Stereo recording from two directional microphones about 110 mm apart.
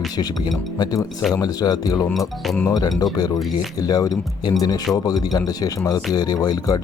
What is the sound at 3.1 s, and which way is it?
Speech, 35° left (ahead or behind).